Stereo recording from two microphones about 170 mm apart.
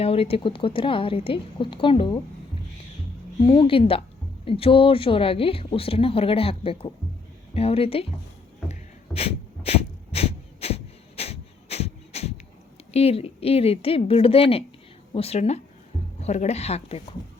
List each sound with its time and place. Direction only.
0.0 s a woman's voice: 35° left (ahead or behind)
3.4 s a woman's voice: 30° left (ahead or behind)
8.7 s a sound: 35° left (ahead or behind)
11.2 s shuffle: 35° left (ahead or behind)
12.9 s a woman's voice: 35° left (ahead or behind)